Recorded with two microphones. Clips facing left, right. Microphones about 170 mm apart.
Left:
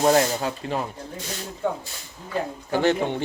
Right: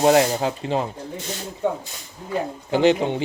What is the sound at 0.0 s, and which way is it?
Speech, 15° right (ahead or behind).